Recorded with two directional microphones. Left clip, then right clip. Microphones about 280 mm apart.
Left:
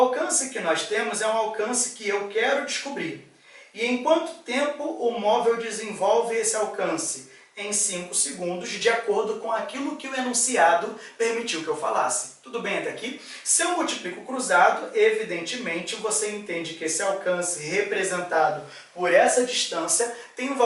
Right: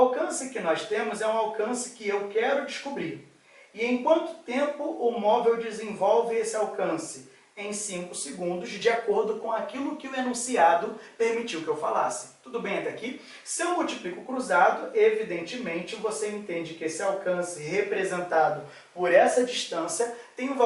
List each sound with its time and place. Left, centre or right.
0.1 s speech: centre
4.8 s speech: right
5.3 s speech: centre
9.0 s speech: right